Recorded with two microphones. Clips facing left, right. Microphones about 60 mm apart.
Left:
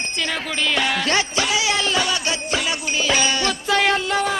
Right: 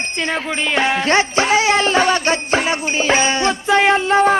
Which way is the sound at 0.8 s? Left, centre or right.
Right.